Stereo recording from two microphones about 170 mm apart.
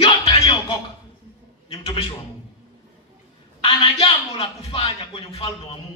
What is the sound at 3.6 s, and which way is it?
A man's voice, 30° left (ahead or behind).